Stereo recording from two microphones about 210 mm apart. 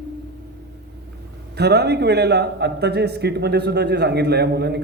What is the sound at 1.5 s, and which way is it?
A man's voice, 50° right (ahead or behind).